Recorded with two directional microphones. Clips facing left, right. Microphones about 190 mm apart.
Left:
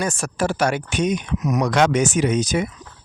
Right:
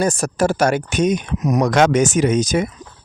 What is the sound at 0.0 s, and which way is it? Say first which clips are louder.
Speech: right 5 dB; 40° right (ahead or behind).